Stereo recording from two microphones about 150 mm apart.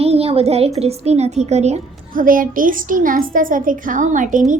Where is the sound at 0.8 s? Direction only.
45° right (ahead or behind).